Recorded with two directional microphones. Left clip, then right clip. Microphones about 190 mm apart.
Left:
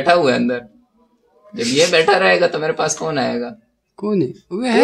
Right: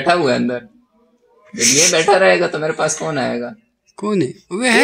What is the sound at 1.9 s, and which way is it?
Speech, 20° right (ahead or behind).